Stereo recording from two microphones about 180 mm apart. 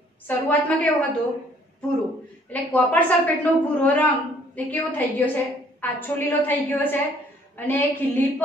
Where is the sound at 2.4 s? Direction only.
10° left (ahead or behind).